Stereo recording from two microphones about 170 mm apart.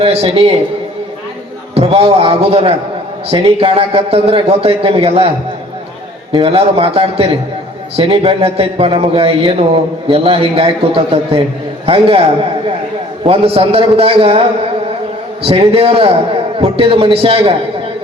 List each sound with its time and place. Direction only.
0.0 s a man's voice: 35° right (ahead or behind)
1.7 s a man's voice: 35° right (ahead or behind)
6.3 s a man's voice: 35° right (ahead or behind)
13.2 s a man's voice: 35° right (ahead or behind)
15.4 s a man's voice: 35° right (ahead or behind)